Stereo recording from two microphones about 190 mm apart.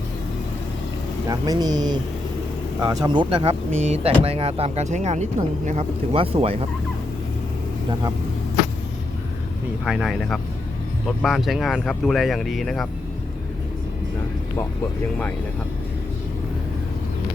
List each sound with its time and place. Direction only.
1.3 s speech: 20° right (ahead or behind)
9.8 s speech: centre (ahead or behind)